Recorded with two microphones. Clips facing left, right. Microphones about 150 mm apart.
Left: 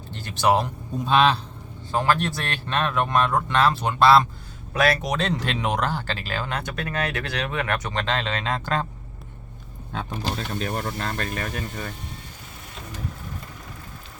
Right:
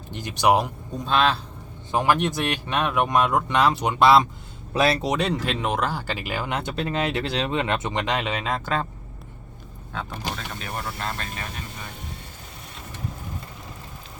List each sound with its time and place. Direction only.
0.1 s speech: 15° right (ahead or behind)
1.0 s a man's voice: centre (ahead or behind)
1.9 s speech: 15° right (ahead or behind)
5.1 s speech: 10° right (ahead or behind)
6.6 s speech: 25° right (ahead or behind); by 8.9 s 5° right (ahead or behind)
10.3 s speech: 35° left (ahead or behind)